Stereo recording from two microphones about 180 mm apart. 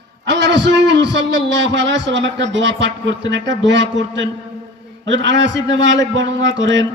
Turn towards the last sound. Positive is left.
turn(degrees=-90)